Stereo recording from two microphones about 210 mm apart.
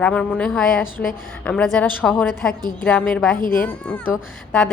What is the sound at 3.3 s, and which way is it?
Speech, 40° left (ahead or behind).